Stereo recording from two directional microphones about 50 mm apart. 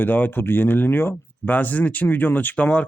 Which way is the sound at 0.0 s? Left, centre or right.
Left.